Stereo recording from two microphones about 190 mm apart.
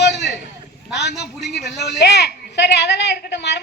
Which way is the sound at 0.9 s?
65° left (ahead or behind).